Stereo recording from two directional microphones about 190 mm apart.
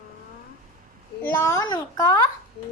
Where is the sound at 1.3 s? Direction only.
15° left (ahead or behind).